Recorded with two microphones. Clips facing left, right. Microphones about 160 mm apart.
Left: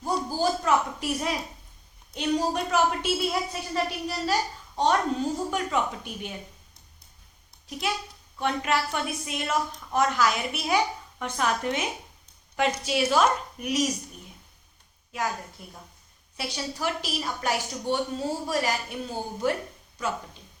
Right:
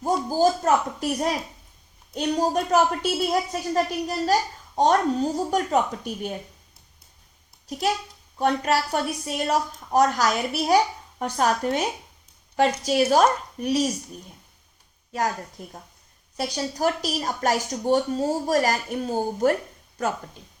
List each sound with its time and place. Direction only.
0.3 s a woman's voice: 45° right (ahead or behind)
7.7 s speech: 40° right (ahead or behind)
15.1 s a woman's voice: 40° right (ahead or behind)